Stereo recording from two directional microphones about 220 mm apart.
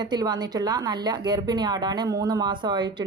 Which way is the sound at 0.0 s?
20° right (ahead or behind).